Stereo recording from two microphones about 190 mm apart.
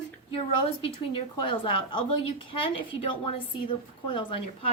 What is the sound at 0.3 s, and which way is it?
A woman's voice, 30° left (ahead or behind).